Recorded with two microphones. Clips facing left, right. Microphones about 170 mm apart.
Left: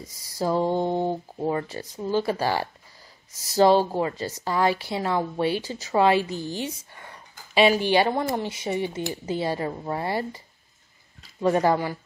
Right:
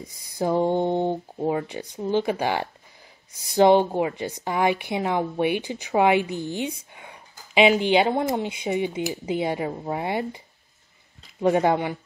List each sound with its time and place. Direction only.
0.4 s speech: 20° right (ahead or behind)
1.1 s speech: 5° right (ahead or behind)
7.0 s a sound: 15° right (ahead or behind)
7.8 s speech: 20° right (ahead or behind)
9.0 s speech: 5° right (ahead or behind)
9.3 s speech: 15° right (ahead or behind)
11.4 s speech: 20° right (ahead or behind)